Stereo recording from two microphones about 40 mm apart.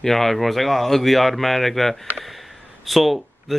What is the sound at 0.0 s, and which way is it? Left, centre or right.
Speech, centre.